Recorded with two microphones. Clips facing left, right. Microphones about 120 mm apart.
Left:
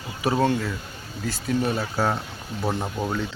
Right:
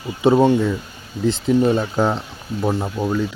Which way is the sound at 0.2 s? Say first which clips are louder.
Right 8 dB; 20° right (ahead or behind).